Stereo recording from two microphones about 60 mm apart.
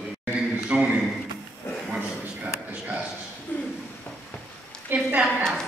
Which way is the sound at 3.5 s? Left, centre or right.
Left.